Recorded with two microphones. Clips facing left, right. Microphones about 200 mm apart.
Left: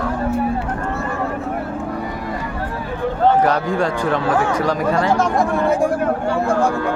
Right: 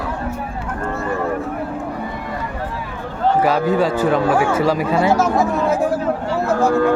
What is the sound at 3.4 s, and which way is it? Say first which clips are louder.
Speech: right 2 dB; 5° right (ahead or behind).